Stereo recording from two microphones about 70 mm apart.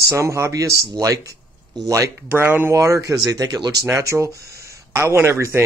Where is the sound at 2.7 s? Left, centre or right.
Right.